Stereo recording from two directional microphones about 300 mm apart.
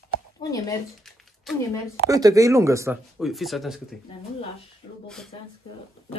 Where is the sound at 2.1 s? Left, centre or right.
Centre.